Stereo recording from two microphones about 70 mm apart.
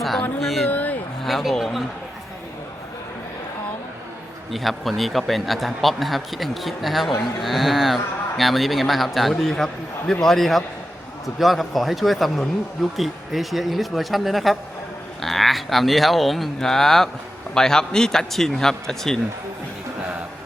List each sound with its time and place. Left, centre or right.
0.2 s speech: centre
0.7 s a sound: left
1.2 s speech: centre
4.5 s a man's voice: centre